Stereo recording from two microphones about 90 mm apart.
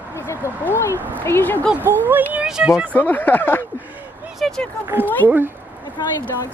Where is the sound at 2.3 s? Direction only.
10° right (ahead or behind).